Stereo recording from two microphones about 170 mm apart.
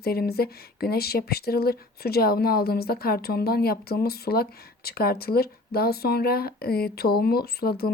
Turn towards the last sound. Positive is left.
turn(degrees=65)  # may be behind; listen again after turning